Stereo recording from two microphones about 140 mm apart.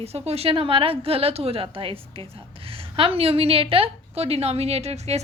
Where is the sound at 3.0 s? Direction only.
45° right (ahead or behind).